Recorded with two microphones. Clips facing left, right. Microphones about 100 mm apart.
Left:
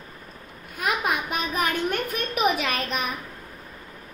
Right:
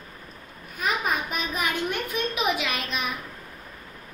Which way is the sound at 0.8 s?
65° left (ahead or behind).